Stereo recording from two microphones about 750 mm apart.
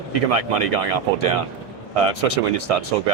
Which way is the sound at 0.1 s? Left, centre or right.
Right.